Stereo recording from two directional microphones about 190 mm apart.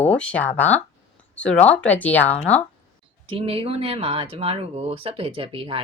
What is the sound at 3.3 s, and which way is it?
A woman's voice, 30° right (ahead or behind).